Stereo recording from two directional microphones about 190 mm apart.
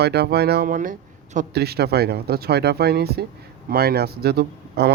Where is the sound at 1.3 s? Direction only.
55° right (ahead or behind).